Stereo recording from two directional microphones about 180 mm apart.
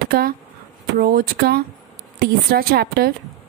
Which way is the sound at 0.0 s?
55° right (ahead or behind).